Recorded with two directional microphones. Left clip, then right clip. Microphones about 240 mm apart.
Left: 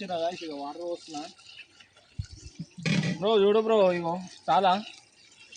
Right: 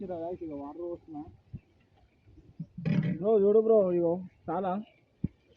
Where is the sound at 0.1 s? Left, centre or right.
Left.